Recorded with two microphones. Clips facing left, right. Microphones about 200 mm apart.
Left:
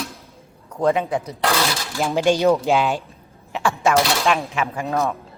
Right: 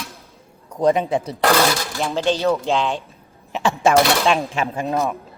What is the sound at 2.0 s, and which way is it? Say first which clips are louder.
Speech: left 3 dB; 10° left (ahead or behind).